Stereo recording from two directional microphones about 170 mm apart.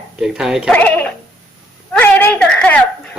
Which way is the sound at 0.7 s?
10° left (ahead or behind).